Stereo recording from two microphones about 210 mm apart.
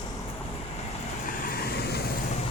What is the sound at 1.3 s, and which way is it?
Vehicle, 40° left (ahead or behind).